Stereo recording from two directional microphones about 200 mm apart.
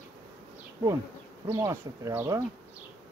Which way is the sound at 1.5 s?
10° right (ahead or behind).